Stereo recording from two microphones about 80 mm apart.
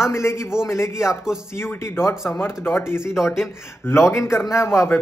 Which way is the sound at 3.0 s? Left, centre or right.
Centre.